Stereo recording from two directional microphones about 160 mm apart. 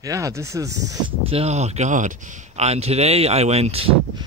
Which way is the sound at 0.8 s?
35° right (ahead or behind).